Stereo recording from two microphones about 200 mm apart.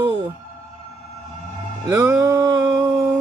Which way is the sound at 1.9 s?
15° right (ahead or behind).